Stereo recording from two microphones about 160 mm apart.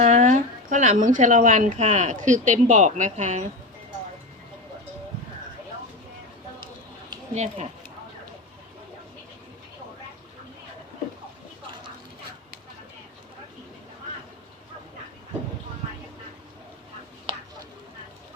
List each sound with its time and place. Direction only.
0.0 s speech: 50° right (ahead or behind)
7.3 s speech: 45° right (ahead or behind)